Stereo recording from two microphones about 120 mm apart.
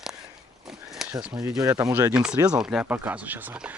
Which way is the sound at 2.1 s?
5° right (ahead or behind).